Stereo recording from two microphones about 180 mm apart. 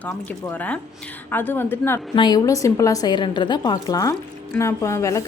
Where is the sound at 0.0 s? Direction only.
10° left (ahead or behind).